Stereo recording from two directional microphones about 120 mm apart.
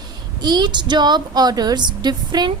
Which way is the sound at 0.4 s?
35° right (ahead or behind).